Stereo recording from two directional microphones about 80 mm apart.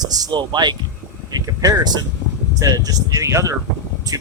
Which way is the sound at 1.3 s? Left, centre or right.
Right.